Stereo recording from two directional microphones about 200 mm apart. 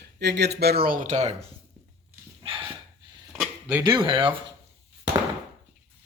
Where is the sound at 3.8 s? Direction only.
20° right (ahead or behind).